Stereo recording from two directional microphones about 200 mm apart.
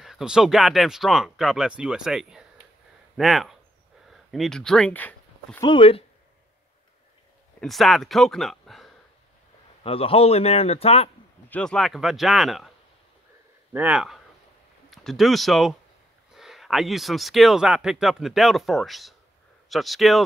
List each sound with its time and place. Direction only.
0.0 s speech: centre (ahead or behind)
5.6 s a man's voice: 25° left (ahead or behind)
7.6 s speech: centre (ahead or behind)
9.8 s a man's voice: 30° left (ahead or behind)
11.4 s speech: 5° left (ahead or behind)
13.7 s speech: 5° right (ahead or behind)